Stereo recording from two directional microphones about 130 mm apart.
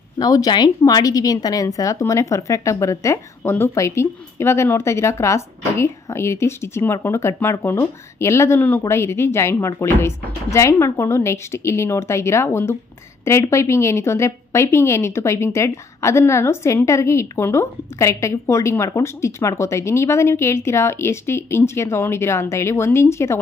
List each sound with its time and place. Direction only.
0.2 s speech: 30° left (ahead or behind)